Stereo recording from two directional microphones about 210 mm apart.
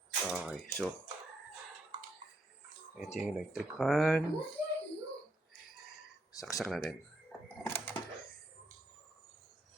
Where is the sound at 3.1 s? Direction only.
5° right (ahead or behind).